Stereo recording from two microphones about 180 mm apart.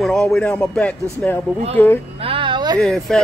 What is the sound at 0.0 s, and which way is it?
Speech, 5° left (ahead or behind).